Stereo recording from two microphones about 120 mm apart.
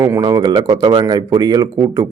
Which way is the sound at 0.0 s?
30° right (ahead or behind).